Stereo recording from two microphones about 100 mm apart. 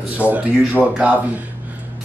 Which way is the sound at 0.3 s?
15° right (ahead or behind).